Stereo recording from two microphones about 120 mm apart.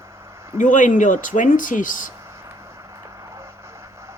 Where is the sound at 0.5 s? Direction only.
90° left.